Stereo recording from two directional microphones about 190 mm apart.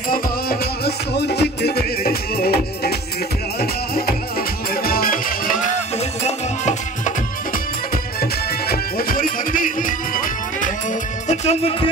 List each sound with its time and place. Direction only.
0.1 s music: 55° left (ahead or behind)
5.9 s music: 35° left (ahead or behind)
11.2 s music: 35° left (ahead or behind)